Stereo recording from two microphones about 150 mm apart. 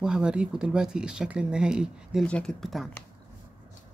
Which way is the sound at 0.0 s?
5° right (ahead or behind).